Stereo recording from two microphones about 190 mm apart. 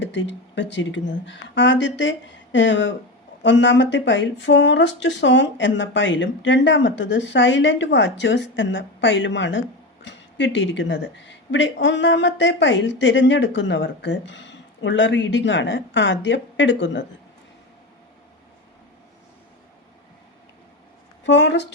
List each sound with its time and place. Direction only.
0.0 s speech: 70° left (ahead or behind)
21.2 s speech: 70° left (ahead or behind)